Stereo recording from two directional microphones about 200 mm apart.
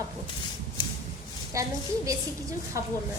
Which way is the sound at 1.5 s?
15° right (ahead or behind).